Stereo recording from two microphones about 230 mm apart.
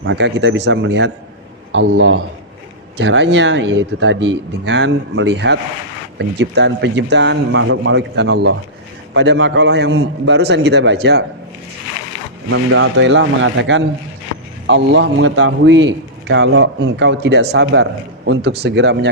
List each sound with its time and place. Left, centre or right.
0.0 s a man's voice: right
12.5 s a man's voice: right